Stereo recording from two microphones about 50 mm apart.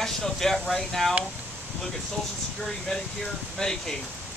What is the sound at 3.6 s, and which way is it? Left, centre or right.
Speech, centre.